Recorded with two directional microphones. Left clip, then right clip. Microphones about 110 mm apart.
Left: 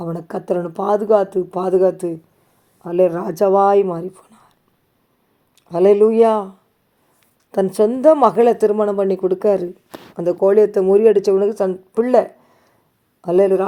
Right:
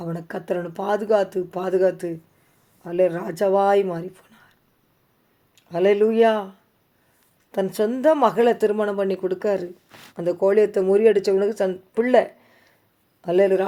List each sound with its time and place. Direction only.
0.0 s speech: 35° left (ahead or behind)
5.5 s speech: 45° left (ahead or behind)
7.5 s speech: 40° left (ahead or behind)